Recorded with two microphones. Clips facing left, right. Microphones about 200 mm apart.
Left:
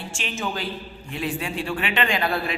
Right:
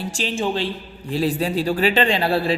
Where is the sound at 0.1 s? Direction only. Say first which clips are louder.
Right 6 dB; 35° right (ahead or behind).